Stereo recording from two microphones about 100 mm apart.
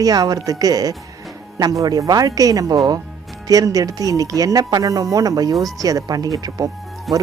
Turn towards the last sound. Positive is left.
turn(degrees=0)  # may be behind; listen again after turning